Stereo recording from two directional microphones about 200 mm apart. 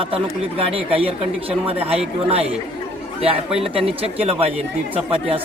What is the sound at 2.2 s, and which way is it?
A man's voice, 30° right (ahead or behind).